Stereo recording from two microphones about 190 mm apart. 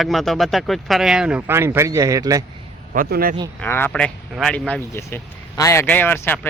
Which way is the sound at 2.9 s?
50° right (ahead or behind).